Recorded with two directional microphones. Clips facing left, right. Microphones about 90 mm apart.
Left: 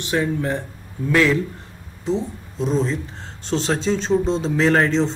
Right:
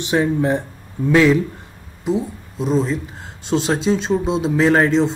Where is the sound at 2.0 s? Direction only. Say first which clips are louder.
Right 2 dB; 5° right (ahead or behind).